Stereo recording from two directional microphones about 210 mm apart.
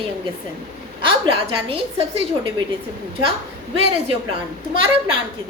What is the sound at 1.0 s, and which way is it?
A woman's voice, 25° right (ahead or behind).